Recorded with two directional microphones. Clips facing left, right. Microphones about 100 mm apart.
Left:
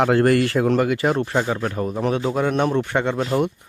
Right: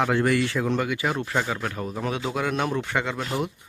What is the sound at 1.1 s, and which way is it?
Speech, 30° left (ahead or behind).